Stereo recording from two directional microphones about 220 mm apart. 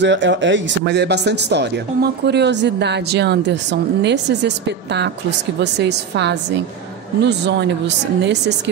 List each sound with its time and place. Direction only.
0.0 s speech: 55° right (ahead or behind)